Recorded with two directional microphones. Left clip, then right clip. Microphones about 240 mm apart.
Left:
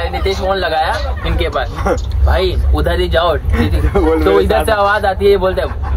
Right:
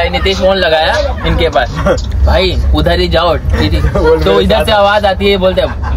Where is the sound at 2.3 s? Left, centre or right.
Right.